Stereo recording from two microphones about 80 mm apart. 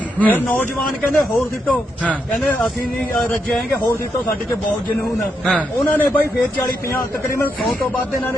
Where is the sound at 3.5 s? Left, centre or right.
Centre.